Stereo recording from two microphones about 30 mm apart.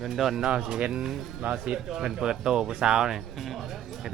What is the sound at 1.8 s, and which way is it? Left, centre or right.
Speech, centre.